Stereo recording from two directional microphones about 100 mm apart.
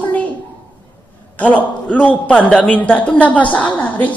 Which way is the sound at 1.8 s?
15° left (ahead or behind).